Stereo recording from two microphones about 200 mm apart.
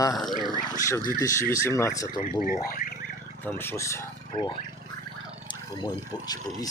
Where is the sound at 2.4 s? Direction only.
45° left (ahead or behind).